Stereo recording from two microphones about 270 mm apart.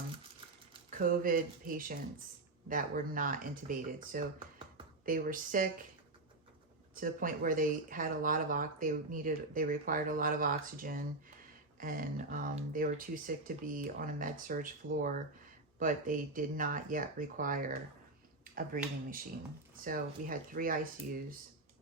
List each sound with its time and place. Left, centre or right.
0.9 s speech: right
6.9 s speech: right